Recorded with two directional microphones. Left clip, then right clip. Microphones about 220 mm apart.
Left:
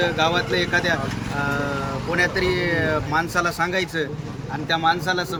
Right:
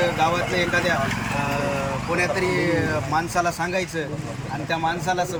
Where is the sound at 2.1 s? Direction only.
20° left (ahead or behind).